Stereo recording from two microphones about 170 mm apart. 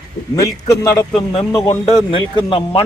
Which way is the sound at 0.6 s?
20° left (ahead or behind).